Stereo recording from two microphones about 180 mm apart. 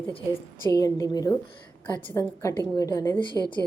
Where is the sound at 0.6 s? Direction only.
20° left (ahead or behind).